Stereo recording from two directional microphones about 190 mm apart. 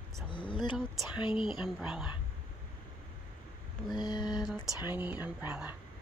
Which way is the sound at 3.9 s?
20° left (ahead or behind).